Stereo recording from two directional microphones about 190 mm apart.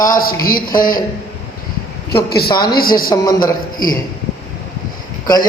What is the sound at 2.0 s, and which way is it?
Speech, 55° left (ahead or behind).